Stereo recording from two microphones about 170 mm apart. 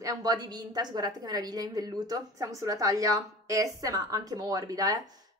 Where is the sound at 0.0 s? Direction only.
20° right (ahead or behind).